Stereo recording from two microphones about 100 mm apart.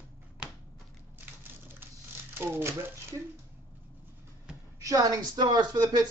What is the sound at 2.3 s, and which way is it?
Speech, 25° right (ahead or behind).